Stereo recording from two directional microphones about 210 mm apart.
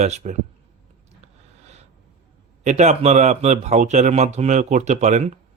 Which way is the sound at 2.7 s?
35° right (ahead or behind).